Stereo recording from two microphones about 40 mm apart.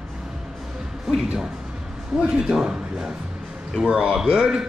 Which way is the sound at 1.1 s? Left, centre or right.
Centre.